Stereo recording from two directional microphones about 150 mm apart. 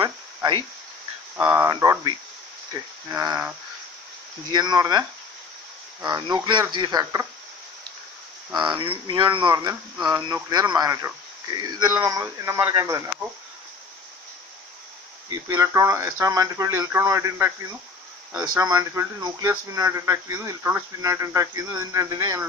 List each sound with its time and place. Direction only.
0.0 s a sound: 30° right (ahead or behind)
1.3 s speech: 15° right (ahead or behind)
4.5 s speech: 30° right (ahead or behind)
6.0 s speech: 25° right (ahead or behind)
8.5 s speech: 30° right (ahead or behind)
15.2 s speech: 25° right (ahead or behind)